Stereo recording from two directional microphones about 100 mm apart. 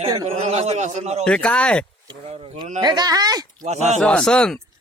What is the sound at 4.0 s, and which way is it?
Speech, 5° left (ahead or behind).